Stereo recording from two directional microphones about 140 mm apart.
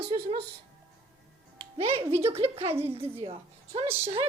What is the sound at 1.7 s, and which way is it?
A woman's voice, 45° right (ahead or behind).